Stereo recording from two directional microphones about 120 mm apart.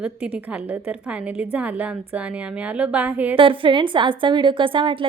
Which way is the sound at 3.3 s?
45° right (ahead or behind).